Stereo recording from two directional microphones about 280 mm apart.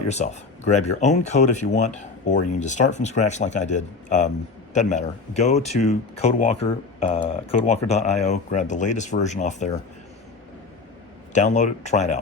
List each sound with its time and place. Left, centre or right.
0.1 s speech: left
11.3 s speech: left